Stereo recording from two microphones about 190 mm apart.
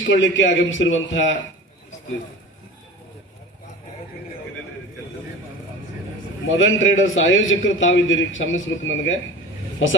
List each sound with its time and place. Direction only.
0.1 s a man's voice: 75° left (ahead or behind)
6.5 s a man's voice: 90° left